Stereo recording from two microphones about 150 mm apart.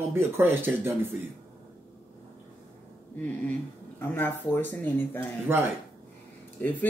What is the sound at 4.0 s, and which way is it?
Speech, 10° left (ahead or behind).